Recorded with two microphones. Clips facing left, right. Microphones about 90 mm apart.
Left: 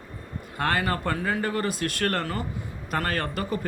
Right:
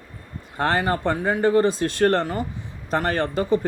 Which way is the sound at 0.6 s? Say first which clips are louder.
Right 4 dB; 30° right (ahead or behind).